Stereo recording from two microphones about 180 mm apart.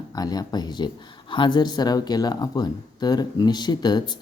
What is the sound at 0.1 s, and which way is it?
Speech, 20° left (ahead or behind).